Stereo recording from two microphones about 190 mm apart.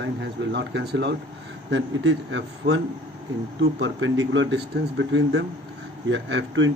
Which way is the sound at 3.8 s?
90° right.